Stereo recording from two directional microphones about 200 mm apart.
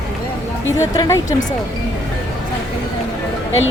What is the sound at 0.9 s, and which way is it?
Speech, 15° left (ahead or behind).